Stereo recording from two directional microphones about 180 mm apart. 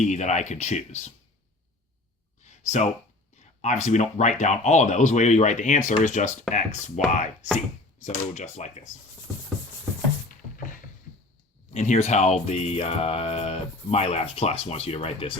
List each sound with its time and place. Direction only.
0.0 s speech: 40° left (ahead or behind)
2.6 s speech: 40° left (ahead or behind)
11.7 s speech: 40° left (ahead or behind)